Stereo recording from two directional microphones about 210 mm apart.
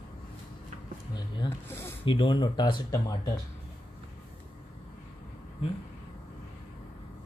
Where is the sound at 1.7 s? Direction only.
10° left (ahead or behind).